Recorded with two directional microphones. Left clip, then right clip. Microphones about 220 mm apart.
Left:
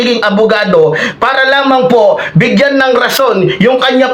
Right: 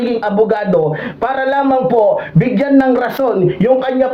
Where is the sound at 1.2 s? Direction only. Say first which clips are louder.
Left 5 dB; 10° left (ahead or behind).